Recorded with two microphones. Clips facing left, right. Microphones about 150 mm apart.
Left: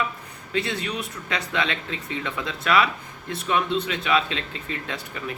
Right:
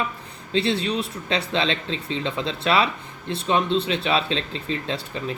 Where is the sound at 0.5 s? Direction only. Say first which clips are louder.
Right 5 dB; 30° right (ahead or behind).